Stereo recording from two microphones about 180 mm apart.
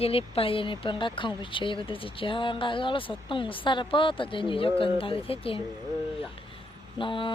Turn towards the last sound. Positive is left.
turn(degrees=30)  # may be behind; listen again after turning